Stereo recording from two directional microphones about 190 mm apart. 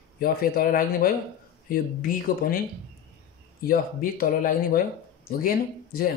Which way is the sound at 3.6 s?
50° left (ahead or behind).